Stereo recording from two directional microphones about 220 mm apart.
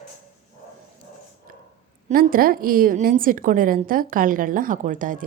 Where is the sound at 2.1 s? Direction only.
40° right (ahead or behind).